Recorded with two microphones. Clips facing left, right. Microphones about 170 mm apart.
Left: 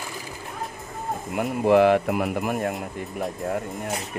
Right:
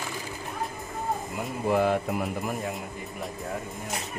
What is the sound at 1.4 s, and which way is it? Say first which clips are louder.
Speech: left 8 dB; 75° left (ahead or behind).